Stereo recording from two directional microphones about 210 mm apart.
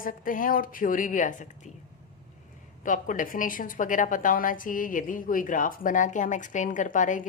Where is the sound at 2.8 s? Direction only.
40° left (ahead or behind).